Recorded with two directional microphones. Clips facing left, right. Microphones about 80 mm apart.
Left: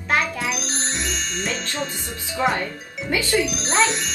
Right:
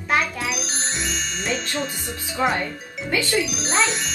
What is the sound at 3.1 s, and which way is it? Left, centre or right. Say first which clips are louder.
Speech: even; centre.